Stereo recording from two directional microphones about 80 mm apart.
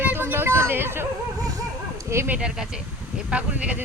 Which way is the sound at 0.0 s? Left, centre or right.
Right.